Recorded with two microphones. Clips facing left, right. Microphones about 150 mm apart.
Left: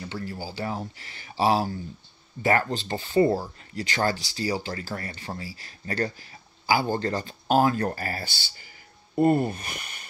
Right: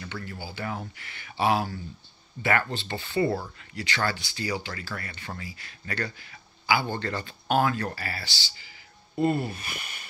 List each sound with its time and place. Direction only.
0.1 s speech: 35° left (ahead or behind)